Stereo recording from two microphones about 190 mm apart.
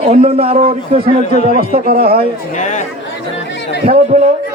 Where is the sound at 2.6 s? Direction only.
40° left (ahead or behind).